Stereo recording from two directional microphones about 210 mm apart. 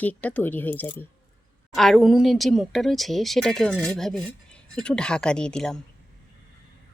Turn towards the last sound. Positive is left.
turn(degrees=5)  # may be behind; listen again after turning